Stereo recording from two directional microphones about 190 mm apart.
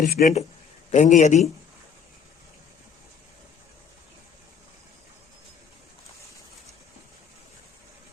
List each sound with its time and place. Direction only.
0.0 s a man's voice: 45° left (ahead or behind)